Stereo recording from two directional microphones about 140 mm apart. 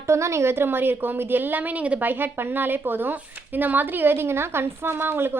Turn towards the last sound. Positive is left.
turn(degrees=-15)  # may be behind; listen again after turning